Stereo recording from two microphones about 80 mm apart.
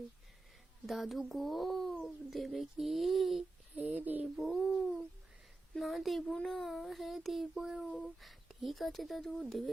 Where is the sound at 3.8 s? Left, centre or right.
Centre.